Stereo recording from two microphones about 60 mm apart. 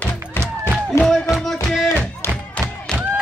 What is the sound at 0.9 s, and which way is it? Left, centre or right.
Music, left.